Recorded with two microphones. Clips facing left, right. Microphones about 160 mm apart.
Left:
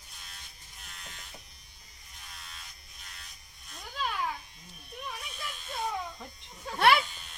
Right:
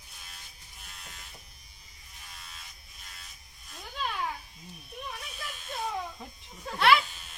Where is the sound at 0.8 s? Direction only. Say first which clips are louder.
Left 1 dB; centre (ahead or behind).